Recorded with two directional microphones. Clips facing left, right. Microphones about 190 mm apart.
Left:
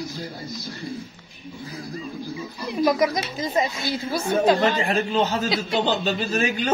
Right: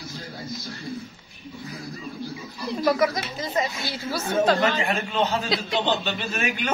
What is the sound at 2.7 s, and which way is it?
Speech, 15° left (ahead or behind).